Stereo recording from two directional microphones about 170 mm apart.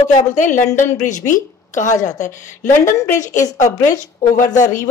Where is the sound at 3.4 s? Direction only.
20° left (ahead or behind).